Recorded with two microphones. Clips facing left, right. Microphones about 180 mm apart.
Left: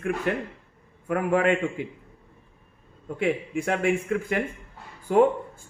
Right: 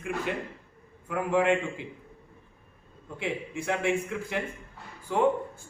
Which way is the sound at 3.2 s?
60° left (ahead or behind).